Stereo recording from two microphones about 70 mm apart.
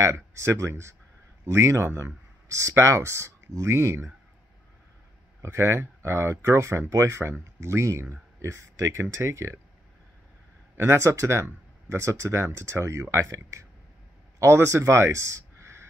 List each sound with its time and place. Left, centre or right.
0.0 s speech: right
5.4 s speech: right
10.8 s speech: right